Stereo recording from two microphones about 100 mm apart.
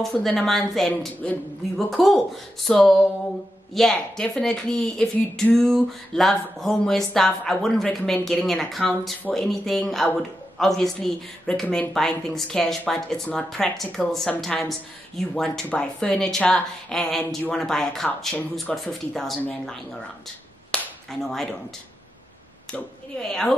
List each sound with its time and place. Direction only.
0.0 s speech: 5° left (ahead or behind)
20.7 s clapping: 5° left (ahead or behind)